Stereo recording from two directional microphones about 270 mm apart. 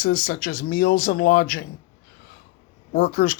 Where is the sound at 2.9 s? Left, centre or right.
Left.